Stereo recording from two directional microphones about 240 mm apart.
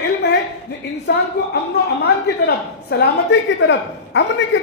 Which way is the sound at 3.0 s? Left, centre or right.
Left.